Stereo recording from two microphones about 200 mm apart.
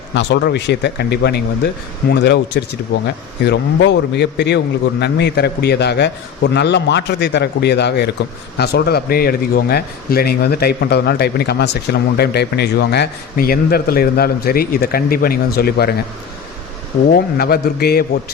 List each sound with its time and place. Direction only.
0.1 s a man's voice: 60° left (ahead or behind)
17.1 s a man's voice: 50° left (ahead or behind)